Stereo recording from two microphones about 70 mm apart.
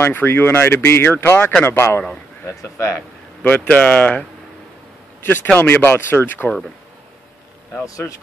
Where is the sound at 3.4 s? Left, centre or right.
Left.